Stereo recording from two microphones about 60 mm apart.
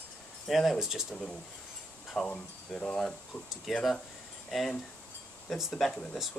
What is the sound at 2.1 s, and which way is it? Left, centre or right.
Speech, centre.